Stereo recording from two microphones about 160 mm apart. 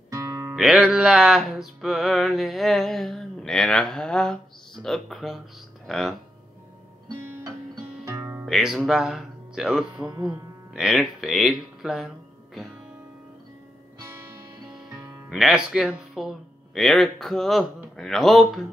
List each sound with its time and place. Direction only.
0.1 s music: 20° right (ahead or behind)
0.6 s music: 5° right (ahead or behind)
5.9 s speech: centre (ahead or behind)
8.5 s speech: centre (ahead or behind)
14.9 s speech: 5° right (ahead or behind)
17.9 s music: centre (ahead or behind)